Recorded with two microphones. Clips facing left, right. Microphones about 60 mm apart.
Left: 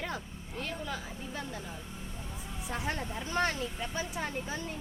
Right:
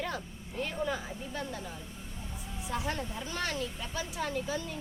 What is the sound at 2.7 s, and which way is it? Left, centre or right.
A woman's voice, left.